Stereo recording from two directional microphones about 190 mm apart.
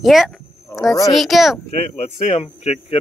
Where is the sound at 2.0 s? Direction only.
30° left (ahead or behind).